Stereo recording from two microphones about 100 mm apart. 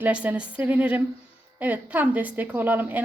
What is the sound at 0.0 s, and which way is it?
Speech, 15° right (ahead or behind).